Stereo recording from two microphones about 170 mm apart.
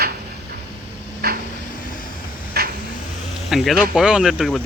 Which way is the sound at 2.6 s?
65° right (ahead or behind).